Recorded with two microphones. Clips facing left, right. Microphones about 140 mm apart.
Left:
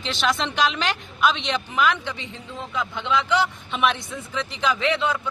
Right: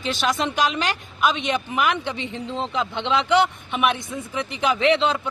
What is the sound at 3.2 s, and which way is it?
Speech, 65° right (ahead or behind).